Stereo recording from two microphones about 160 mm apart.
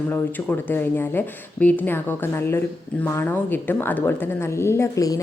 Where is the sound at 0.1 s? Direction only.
10° left (ahead or behind).